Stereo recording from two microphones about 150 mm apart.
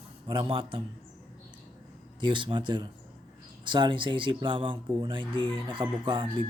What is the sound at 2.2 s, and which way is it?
Speech, 30° right (ahead or behind).